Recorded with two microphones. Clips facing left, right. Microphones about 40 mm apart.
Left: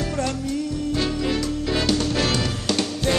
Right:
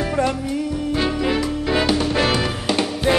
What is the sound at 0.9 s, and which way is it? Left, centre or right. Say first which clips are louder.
Music: right 4 dB; centre.